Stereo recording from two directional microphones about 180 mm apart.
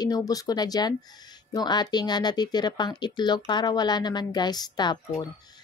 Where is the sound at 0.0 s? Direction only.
20° left (ahead or behind).